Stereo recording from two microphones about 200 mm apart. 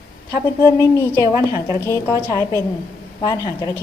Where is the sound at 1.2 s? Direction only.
15° right (ahead or behind).